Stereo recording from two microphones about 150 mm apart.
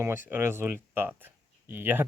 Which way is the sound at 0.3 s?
15° right (ahead or behind).